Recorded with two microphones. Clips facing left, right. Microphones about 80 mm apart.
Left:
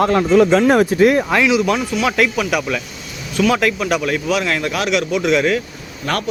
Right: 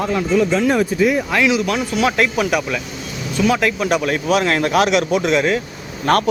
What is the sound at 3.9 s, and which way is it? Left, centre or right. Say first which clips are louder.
Speech: right 1 dB; right.